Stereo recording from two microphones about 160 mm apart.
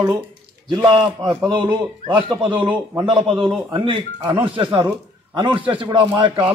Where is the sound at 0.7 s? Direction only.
30° right (ahead or behind).